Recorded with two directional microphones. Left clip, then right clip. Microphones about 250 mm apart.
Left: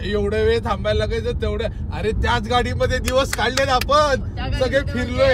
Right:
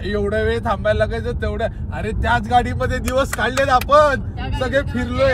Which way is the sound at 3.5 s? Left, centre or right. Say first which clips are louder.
Right 4 dB; centre.